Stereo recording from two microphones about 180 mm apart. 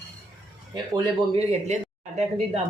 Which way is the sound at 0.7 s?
25° right (ahead or behind).